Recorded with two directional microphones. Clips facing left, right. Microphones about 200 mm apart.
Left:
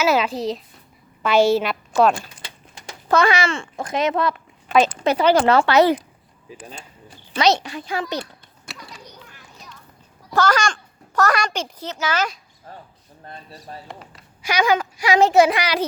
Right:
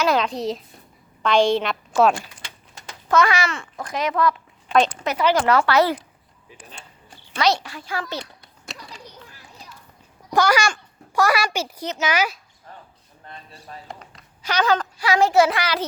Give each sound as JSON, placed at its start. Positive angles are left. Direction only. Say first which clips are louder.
{"t": 0.0, "sound": "a child's voice", "louder": "left 1 dB", "side_deg": 5}
{"t": 3.1, "sound": "a child's voice", "louder": "left 2 dB", "side_deg": 30}
{"t": 7.3, "sound": "a child's voice", "louder": "left 3 dB", "side_deg": 20}
{"t": 10.2, "sound": "a child's voice", "louder": "even", "side_deg": -15}
{"t": 13.2, "sound": "speech", "louder": "left 3 dB", "side_deg": 35}
{"t": 14.1, "sound": "a child's voice", "louder": "left 2 dB", "side_deg": 10}